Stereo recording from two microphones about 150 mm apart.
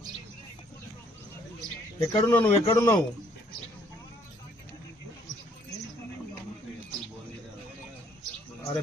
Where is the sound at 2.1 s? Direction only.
20° left (ahead or behind).